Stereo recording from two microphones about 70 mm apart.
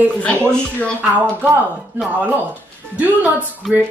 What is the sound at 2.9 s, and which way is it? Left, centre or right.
Speech, right.